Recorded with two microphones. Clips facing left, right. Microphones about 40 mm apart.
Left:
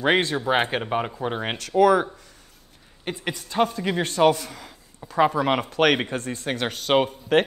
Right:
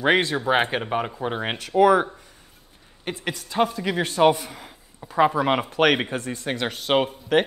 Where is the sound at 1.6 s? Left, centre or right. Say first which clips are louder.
Right 1 dB; centre.